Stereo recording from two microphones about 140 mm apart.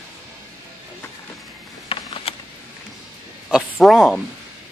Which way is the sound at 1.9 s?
40° left (ahead or behind).